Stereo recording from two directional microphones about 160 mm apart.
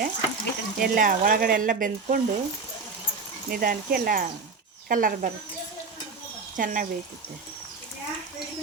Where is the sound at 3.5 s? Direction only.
65° right (ahead or behind).